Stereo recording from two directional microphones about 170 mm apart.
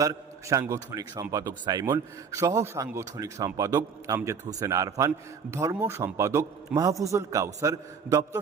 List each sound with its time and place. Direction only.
0.0 s a man's voice: 20° right (ahead or behind)